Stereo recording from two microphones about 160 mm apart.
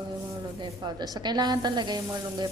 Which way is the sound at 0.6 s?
25° right (ahead or behind).